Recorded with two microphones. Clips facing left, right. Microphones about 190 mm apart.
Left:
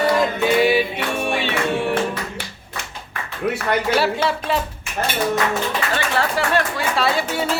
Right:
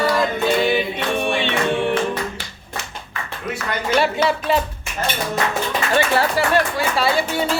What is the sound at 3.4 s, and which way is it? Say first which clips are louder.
Speech: left 6 dB; 65° left (ahead or behind).